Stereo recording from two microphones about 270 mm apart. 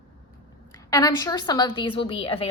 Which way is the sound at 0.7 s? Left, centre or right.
Centre.